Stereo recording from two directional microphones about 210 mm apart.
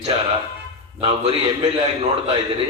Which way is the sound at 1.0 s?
30° right (ahead or behind).